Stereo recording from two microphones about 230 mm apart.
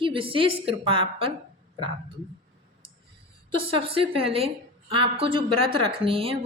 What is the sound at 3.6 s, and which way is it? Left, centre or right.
A woman's voice, right.